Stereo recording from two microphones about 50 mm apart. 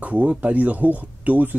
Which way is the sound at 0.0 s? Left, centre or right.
Right.